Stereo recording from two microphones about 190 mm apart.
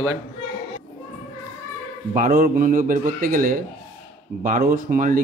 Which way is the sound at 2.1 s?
50° right (ahead or behind).